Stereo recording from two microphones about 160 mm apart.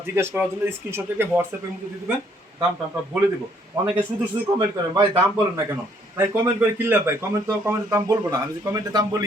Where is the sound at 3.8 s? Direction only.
10° right (ahead or behind).